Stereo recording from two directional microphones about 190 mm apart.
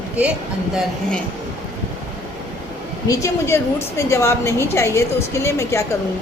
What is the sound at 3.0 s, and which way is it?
A woman's voice, 15° left (ahead or behind).